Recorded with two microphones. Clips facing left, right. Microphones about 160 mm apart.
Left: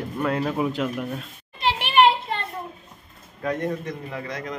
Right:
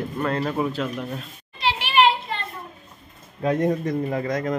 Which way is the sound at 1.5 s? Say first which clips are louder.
Left 1 dB; 55° left (ahead or behind).